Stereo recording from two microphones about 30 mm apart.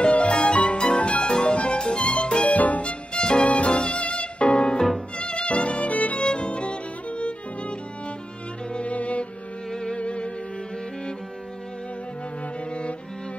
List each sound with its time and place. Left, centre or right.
0.0 s music: left
1.2 s music: left
2.4 s music: left
2.8 s violin: left
3.2 s violin: left
3.4 s music: left
5.1 s violin: left
6.2 s violin: left
8.7 s music: left
9.7 s music: left
9.9 s music: left